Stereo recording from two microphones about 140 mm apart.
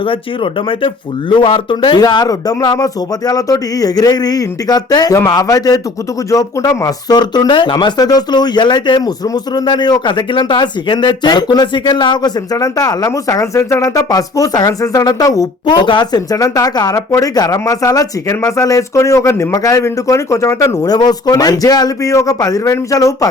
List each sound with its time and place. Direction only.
1.4 s speech: 35° left (ahead or behind)